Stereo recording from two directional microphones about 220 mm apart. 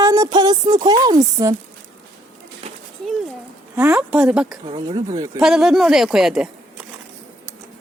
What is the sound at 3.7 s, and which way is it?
Speech, 5° right (ahead or behind).